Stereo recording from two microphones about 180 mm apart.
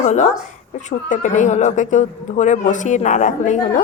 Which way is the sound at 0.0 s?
40° left (ahead or behind).